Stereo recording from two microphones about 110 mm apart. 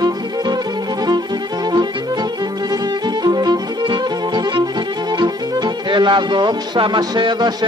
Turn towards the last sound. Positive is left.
turn(degrees=-40)  # may be behind; listen again after turning